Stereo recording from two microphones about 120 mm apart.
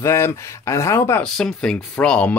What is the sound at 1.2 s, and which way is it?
Speech, 5° left (ahead or behind).